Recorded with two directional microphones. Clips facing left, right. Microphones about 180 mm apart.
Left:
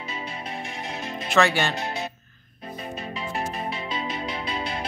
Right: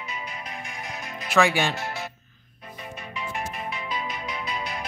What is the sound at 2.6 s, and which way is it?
Music, 35° left (ahead or behind).